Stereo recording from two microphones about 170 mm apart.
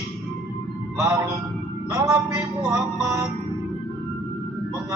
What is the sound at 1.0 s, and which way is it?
Music, 15° right (ahead or behind).